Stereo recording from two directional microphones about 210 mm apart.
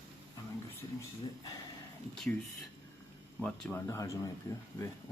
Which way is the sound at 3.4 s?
5° left (ahead or behind).